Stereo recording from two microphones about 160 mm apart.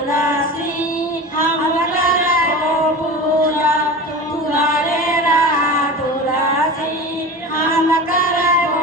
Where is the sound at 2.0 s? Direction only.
65° left (ahead or behind).